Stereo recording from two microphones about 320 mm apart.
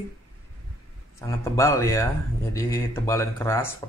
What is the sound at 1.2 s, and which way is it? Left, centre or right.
Speech, centre.